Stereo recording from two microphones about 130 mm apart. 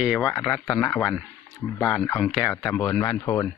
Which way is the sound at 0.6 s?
20° left (ahead or behind).